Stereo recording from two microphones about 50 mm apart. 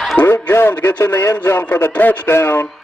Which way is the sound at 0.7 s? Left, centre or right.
Left.